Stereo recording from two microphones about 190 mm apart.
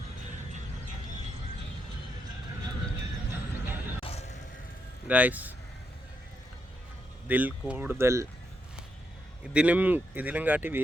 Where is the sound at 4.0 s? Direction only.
35° left (ahead or behind).